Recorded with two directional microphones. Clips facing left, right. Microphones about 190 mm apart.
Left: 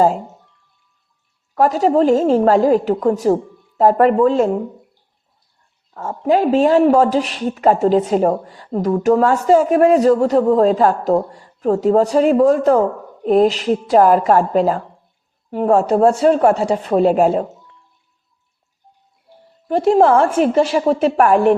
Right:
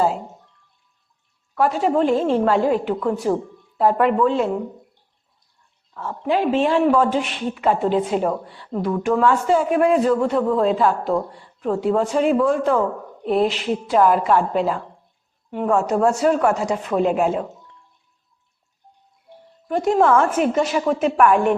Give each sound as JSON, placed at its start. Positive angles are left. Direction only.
{"t": 1.5, "sound": "speech", "side_deg": 40}
{"t": 5.9, "sound": "speech", "side_deg": 45}
{"t": 19.6, "sound": "speech", "side_deg": 30}